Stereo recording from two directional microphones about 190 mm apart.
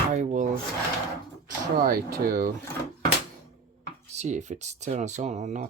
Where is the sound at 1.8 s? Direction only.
50° right (ahead or behind).